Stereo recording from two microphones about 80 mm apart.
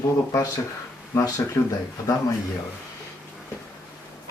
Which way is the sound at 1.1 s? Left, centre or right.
Left.